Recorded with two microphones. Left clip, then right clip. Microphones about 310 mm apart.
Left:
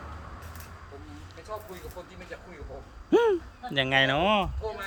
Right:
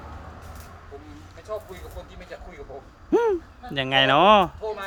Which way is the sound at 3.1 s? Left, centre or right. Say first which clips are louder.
Right 1 dB; centre.